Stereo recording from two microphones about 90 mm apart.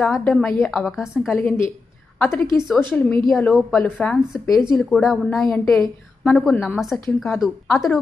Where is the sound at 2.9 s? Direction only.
15° left (ahead or behind).